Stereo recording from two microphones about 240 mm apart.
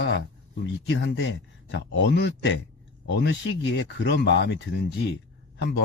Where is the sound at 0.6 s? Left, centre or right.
Left.